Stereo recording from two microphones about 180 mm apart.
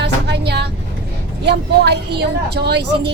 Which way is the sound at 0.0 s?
70° right (ahead or behind).